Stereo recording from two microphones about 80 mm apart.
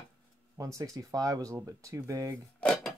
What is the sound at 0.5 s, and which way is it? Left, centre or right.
Speech, right.